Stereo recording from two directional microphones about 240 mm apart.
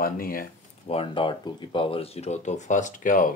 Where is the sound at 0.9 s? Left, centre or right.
Left.